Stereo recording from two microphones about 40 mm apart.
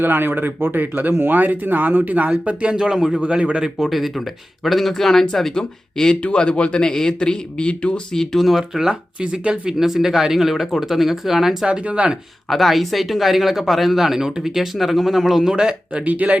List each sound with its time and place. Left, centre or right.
0.0 s speech: right
2.6 s speech: right
2.9 s speech: centre; by 7.9 s left
8.1 s speech: centre
8.4 s speech: centre
9.2 s speech: right
9.7 s speech: centre
11.9 s speech: right
12.5 s speech: centre
15.5 s speech: right
16.0 s speech: right